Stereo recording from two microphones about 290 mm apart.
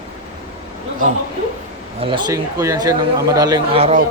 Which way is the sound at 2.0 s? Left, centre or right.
Centre.